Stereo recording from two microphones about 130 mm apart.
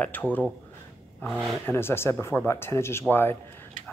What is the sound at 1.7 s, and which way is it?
Speech, 20° left (ahead or behind).